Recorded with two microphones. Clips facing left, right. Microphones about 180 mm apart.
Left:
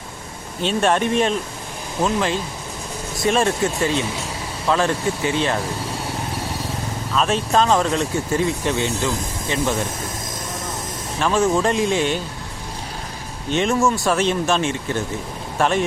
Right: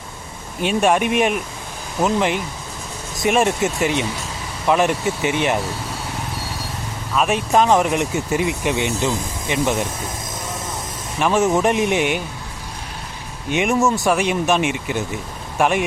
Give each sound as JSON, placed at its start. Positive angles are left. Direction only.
{"t": 0.6, "sound": "speech", "side_deg": -10}
{"t": 7.2, "sound": "speech", "side_deg": -15}
{"t": 11.2, "sound": "speech", "side_deg": -15}
{"t": 13.5, "sound": "speech", "side_deg": -15}